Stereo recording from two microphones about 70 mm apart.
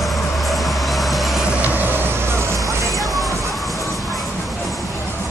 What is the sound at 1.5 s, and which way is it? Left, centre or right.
Vehicle, right.